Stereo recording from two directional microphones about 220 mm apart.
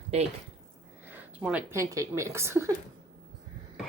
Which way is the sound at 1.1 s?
10° right (ahead or behind).